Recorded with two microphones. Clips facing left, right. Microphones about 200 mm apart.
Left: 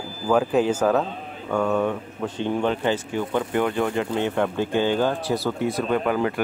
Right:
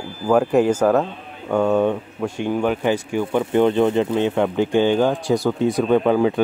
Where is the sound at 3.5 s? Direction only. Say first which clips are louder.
Right 9 dB; 25° right (ahead or behind).